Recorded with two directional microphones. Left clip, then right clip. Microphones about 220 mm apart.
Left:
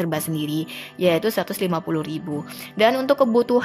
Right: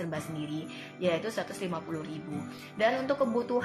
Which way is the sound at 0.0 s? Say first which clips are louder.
Left 11 dB; 50° left (ahead or behind).